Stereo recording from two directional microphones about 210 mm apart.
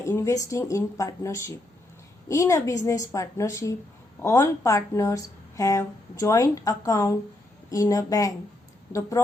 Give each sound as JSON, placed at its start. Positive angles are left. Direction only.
{"t": 0.0, "sound": "speech", "side_deg": 15}